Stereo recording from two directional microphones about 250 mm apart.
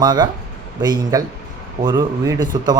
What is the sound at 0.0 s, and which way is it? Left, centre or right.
Speech, centre.